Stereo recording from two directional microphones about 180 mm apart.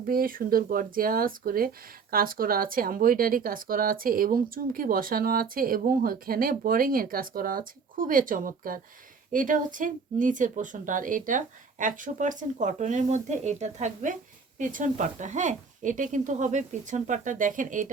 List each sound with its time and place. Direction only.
0.0 s speech: 55° right (ahead or behind)